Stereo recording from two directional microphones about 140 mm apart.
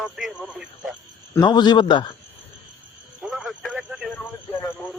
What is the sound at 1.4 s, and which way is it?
Speech, 30° left (ahead or behind).